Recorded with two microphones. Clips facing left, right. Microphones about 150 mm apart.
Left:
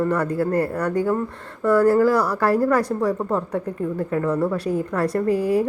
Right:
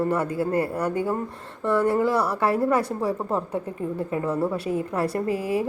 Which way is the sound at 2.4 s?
Centre (ahead or behind).